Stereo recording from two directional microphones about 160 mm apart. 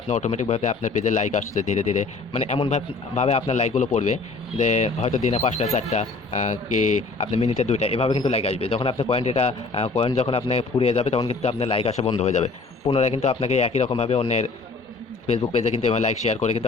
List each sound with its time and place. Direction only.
0.1 s a man's voice: 45° left (ahead or behind)